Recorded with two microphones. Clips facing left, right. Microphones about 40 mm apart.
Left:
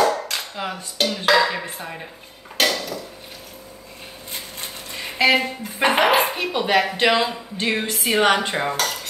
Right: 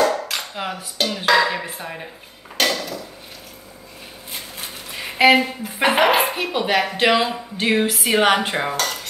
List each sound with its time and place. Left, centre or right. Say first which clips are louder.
0.2 s dishes: right 1 dB; centre
4.3 s a sound: right 1 dB; centre
5.4 s speech: right 1 dB; centre